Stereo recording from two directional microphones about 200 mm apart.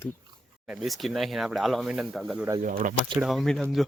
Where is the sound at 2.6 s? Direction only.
40° right (ahead or behind).